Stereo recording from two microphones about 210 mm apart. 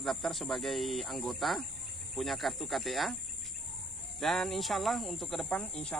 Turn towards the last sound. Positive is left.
turn(degrees=5)  # may be behind; listen again after turning